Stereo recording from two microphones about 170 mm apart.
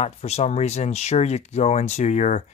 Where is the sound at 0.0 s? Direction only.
40° left (ahead or behind).